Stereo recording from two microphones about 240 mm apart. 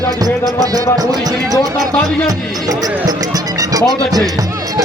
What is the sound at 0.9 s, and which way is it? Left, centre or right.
Speech, centre.